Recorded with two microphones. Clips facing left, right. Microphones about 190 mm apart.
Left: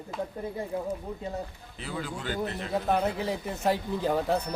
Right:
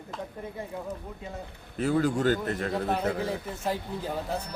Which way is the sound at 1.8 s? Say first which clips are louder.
Right 11 dB; 45° right (ahead or behind).